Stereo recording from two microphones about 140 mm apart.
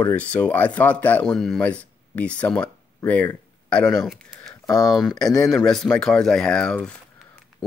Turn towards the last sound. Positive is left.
turn(degrees=5)  # may be behind; listen again after turning